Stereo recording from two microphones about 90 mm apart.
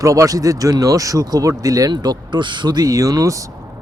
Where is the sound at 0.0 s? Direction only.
35° right (ahead or behind).